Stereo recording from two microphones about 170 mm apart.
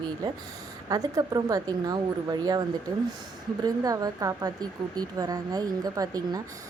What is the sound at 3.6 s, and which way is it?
Speech, 20° right (ahead or behind).